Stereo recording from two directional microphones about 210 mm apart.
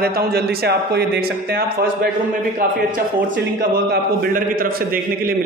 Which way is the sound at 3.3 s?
50° right (ahead or behind).